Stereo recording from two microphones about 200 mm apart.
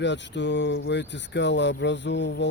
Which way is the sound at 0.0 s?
60° left (ahead or behind).